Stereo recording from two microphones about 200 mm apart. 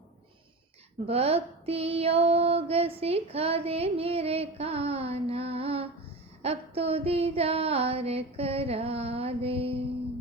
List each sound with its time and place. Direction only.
1.0 s female singing: 30° right (ahead or behind)